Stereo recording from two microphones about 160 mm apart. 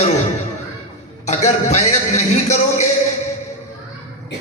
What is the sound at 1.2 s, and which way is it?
A man's voice, 45° left (ahead or behind).